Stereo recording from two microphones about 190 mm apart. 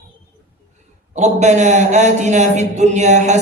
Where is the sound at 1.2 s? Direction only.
35° right (ahead or behind).